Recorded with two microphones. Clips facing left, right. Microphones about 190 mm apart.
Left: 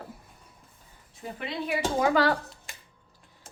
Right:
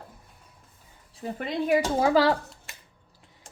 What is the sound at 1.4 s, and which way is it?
Speech, 45° right (ahead or behind).